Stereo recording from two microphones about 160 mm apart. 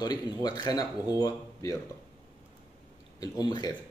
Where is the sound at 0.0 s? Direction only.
25° left (ahead or behind).